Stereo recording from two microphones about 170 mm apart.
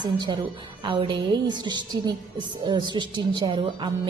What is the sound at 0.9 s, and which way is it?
A woman's voice, 30° right (ahead or behind).